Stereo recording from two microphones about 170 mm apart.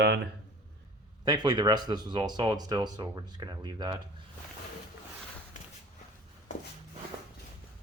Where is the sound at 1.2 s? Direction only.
25° right (ahead or behind).